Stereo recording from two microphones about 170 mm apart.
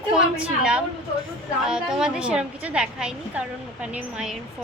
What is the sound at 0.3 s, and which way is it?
A woman's voice, 5° right (ahead or behind).